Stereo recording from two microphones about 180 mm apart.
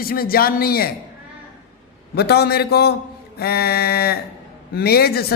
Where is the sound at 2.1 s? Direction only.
60° left (ahead or behind).